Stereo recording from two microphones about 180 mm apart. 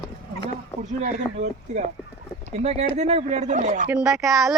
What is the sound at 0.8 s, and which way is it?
Speech, 40° right (ahead or behind).